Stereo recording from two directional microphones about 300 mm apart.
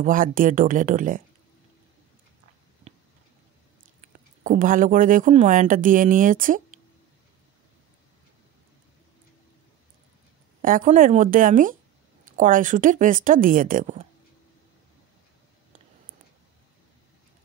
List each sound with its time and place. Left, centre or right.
0.0 s speech: right
4.0 s speech: right
10.6 s speech: right